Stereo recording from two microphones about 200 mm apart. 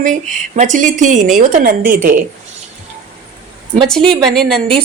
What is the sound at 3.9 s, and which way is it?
Speech, 5° left (ahead or behind).